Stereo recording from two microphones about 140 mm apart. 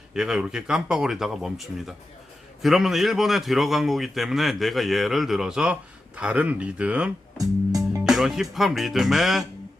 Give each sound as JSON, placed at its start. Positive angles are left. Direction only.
{"t": 0.1, "sound": "a man's voice", "side_deg": -5}
{"t": 7.3, "sound": "music", "side_deg": -25}
{"t": 8.0, "sound": "a man's voice", "side_deg": 0}